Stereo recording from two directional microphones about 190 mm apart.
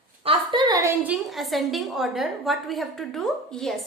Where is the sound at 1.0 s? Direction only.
Centre (ahead or behind).